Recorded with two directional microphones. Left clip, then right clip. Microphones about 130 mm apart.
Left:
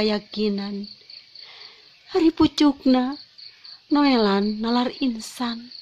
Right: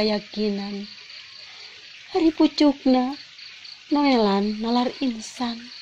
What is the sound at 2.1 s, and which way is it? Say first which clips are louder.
Speech: left 1 dB; 15° left (ahead or behind).